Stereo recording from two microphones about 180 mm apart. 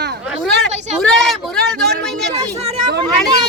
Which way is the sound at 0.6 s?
5° left (ahead or behind).